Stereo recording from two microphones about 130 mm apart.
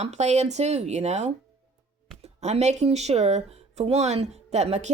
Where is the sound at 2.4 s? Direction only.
60° right (ahead or behind).